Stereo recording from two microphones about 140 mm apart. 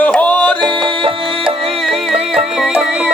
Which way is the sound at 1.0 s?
40° right (ahead or behind).